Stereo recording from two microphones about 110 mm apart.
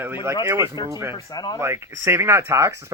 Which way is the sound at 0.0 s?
20° right (ahead or behind).